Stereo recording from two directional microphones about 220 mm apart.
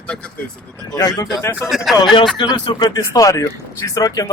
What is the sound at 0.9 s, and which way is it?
Speech, 15° left (ahead or behind).